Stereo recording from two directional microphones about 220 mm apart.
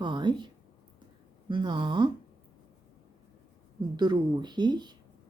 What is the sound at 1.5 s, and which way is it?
Speech, 20° right (ahead or behind).